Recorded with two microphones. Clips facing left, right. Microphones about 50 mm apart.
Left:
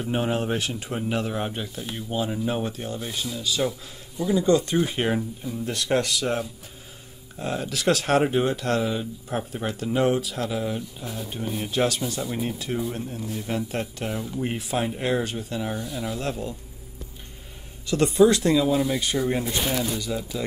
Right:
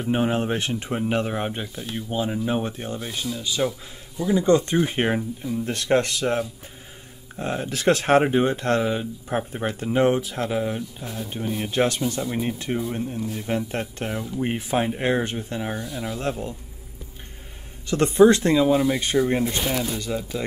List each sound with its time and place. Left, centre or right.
0.0 s speech: centre
0.7 s speech: right; by 4.5 s centre
4.5 s speech: right
5.7 s speech: right
8.5 s speech: right
11.1 s speech: centre
17.8 s speech: right
20.2 s speech: right